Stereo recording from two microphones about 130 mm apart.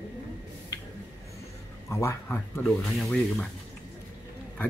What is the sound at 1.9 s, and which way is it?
Speech, 20° left (ahead or behind).